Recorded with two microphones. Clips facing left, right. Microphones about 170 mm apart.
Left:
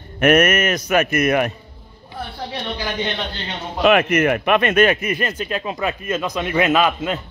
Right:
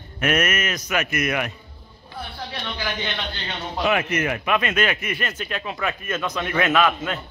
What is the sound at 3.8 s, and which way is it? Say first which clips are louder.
Speech: left 7 dB; 65° left (ahead or behind).